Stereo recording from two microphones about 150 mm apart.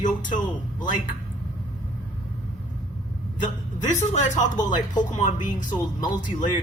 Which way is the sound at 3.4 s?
55° left (ahead or behind).